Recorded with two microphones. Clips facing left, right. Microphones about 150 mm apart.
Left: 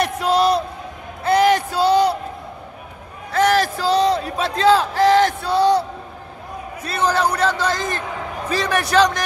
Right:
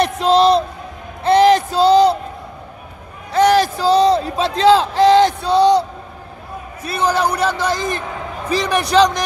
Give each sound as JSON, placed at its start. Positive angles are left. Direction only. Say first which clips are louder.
{"t": 0.0, "sound": "a sound", "louder": "right 4 dB", "side_deg": -25}
{"t": 3.3, "sound": "battle cry", "louder": "right 4 dB", "side_deg": -20}
{"t": 6.8, "sound": "a man's voice", "louder": "right 2 dB", "side_deg": -10}